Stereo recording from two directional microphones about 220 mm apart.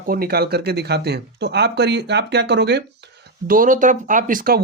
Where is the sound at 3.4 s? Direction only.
40° right (ahead or behind).